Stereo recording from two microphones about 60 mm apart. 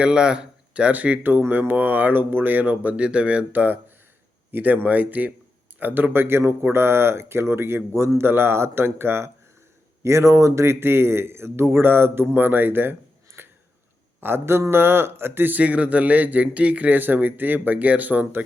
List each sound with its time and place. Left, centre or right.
0.0 s speech: centre
1.3 s speech: right